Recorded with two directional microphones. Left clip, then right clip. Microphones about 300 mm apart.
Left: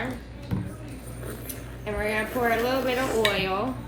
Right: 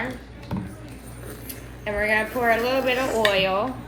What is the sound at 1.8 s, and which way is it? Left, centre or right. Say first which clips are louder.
A woman's voice: right 5 dB; centre.